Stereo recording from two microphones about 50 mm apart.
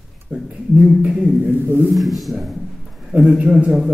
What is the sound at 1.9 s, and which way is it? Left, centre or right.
Speech, centre.